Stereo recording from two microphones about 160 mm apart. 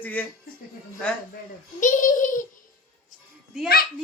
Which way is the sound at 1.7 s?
55° left (ahead or behind).